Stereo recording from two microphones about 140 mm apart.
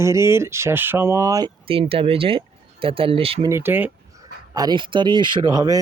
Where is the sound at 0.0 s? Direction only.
20° right (ahead or behind).